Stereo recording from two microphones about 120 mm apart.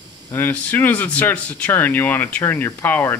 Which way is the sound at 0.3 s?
15° left (ahead or behind).